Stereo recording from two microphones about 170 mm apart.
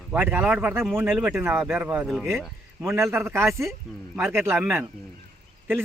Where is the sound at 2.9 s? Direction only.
15° right (ahead or behind).